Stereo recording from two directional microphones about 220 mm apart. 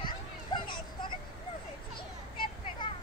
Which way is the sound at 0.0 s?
20° left (ahead or behind).